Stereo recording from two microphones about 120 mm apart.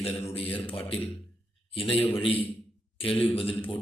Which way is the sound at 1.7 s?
50° left (ahead or behind).